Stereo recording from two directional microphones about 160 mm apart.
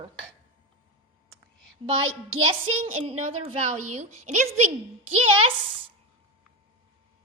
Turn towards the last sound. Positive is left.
turn(degrees=-40)  # may be behind; listen again after turning